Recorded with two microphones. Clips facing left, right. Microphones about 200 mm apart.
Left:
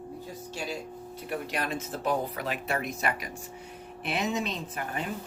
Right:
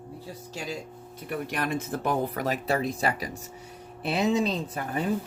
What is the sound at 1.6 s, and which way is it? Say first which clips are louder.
Speech: right 3 dB; 55° right (ahead or behind).